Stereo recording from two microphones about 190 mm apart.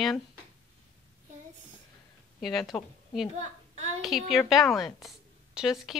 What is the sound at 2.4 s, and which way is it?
A woman's voice, centre (ahead or behind).